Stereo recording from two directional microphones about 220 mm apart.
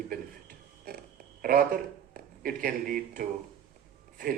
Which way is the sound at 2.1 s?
40° right (ahead or behind).